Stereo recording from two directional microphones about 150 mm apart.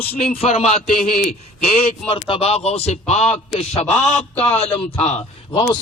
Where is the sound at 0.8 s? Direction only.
65° left (ahead or behind).